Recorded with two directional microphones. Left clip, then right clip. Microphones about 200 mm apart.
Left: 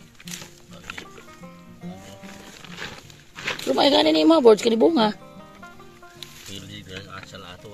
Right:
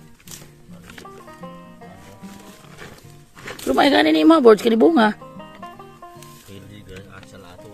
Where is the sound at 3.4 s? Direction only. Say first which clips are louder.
Right 2 dB; 20° right (ahead or behind).